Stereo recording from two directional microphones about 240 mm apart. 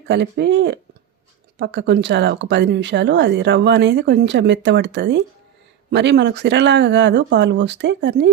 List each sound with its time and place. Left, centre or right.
0.1 s speech: right